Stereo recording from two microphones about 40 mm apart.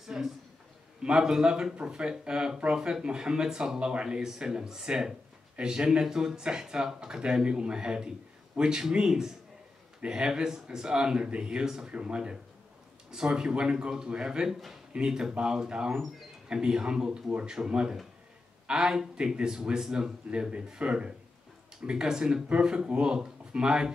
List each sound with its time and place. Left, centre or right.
0.0 s a sound: centre
1.0 s speech: centre
11.6 s speech: centre
11.9 s speech: right